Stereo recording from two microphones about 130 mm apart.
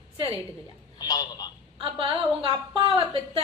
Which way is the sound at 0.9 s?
30° left (ahead or behind).